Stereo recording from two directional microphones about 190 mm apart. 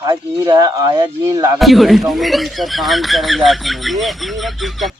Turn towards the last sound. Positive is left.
turn(degrees=0)  # may be behind; listen again after turning